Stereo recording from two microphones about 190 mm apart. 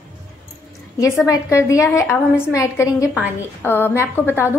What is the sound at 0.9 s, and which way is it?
A woman's voice, 15° left (ahead or behind).